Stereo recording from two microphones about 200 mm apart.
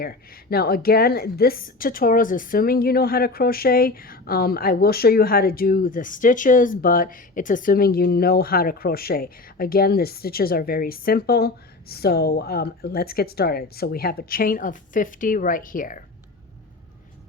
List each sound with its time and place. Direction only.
0.0 s a woman's voice: 50° left (ahead or behind)